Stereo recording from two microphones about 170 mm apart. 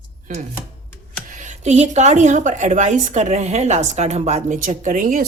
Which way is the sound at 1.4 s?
45° right (ahead or behind).